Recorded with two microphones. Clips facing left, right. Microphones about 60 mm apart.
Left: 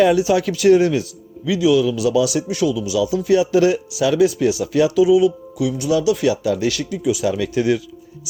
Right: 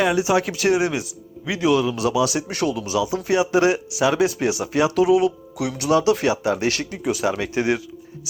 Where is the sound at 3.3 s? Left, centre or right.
Right.